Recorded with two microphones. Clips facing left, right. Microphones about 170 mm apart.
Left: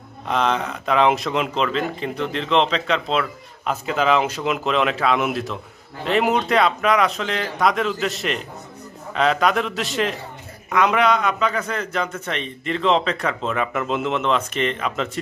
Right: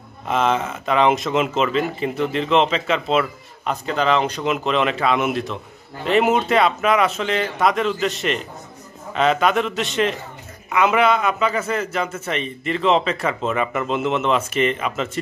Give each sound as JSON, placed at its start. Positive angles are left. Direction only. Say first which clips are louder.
{"t": 0.3, "sound": "speech", "louder": "right 1 dB", "side_deg": -5}